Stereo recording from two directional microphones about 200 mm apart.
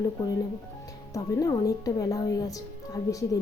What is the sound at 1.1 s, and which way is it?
A woman's voice, 15° left (ahead or behind).